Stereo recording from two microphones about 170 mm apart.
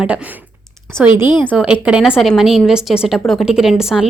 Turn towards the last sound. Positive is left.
turn(degrees=0)  # may be behind; listen again after turning